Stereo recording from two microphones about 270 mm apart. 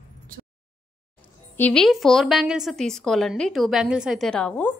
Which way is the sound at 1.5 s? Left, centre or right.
Centre.